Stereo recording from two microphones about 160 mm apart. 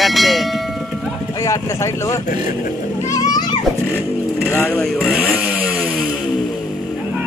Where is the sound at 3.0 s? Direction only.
25° left (ahead or behind).